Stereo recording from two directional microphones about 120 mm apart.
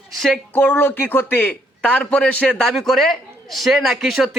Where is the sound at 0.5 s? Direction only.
15° left (ahead or behind).